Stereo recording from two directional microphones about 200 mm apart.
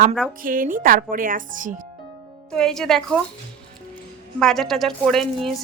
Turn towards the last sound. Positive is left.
turn(degrees=5)  # may be behind; listen again after turning